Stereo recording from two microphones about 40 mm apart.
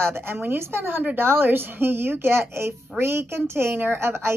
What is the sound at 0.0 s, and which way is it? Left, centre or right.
A woman's voice, right.